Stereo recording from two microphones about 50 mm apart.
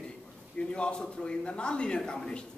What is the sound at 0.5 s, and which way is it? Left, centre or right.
Speech, left.